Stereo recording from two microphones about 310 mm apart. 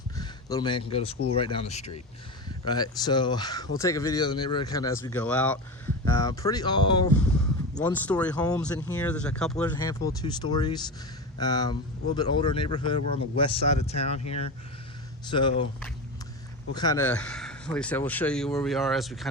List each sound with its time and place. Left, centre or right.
0.2 s speech: centre
7.2 s a sound: centre
7.9 s speech: centre
16.7 s speech: centre